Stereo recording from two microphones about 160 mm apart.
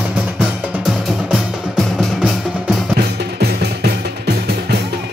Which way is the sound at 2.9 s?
80° right.